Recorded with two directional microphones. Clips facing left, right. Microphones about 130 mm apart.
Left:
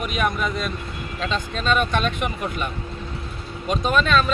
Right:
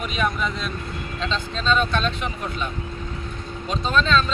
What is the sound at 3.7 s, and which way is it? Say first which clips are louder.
Speech: left 2 dB; 10° left (ahead or behind).